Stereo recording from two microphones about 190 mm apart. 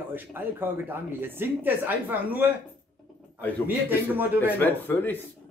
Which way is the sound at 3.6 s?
10° right (ahead or behind).